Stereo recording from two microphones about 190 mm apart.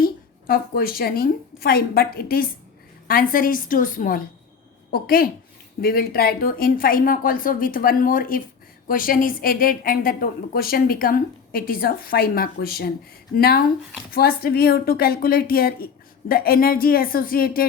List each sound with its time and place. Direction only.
0.0 s a woman's voice: 50° left (ahead or behind)